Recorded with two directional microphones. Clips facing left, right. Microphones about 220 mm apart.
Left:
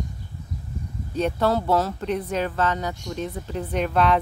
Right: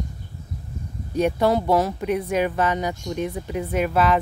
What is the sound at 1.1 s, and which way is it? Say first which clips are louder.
Speech: right 3 dB; 15° right (ahead or behind).